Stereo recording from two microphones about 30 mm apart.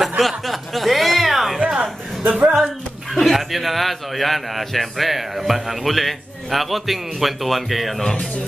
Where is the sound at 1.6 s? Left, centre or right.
Right.